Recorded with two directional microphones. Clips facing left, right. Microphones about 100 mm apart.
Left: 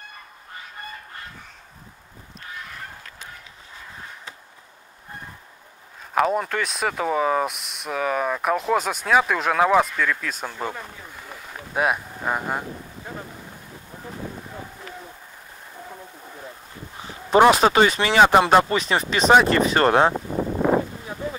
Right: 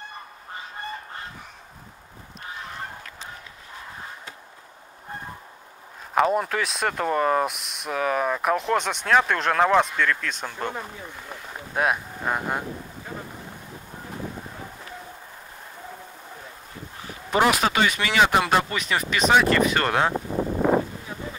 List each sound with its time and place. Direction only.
6.1 s speech: centre (ahead or behind)
17.3 s speech: 30° left (ahead or behind)